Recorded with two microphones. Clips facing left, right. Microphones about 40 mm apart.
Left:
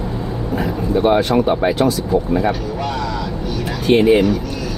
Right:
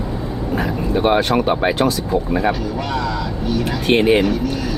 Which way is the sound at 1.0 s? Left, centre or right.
Right.